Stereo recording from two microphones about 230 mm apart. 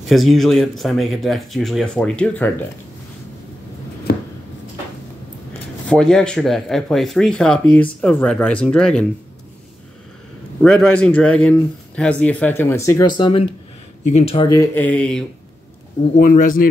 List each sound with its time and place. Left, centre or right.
0.1 s speech: centre
5.9 s speech: centre
10.6 s speech: centre
13.2 s speech: left
14.5 s speech: centre
16.2 s speech: left